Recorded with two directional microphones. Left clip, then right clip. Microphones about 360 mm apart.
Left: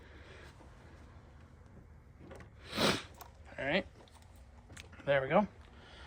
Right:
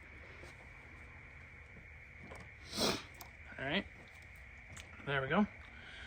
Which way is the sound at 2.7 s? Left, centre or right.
Left.